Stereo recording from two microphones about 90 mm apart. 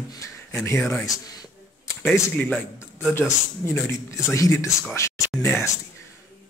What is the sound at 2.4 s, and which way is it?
Speech, 15° left (ahead or behind).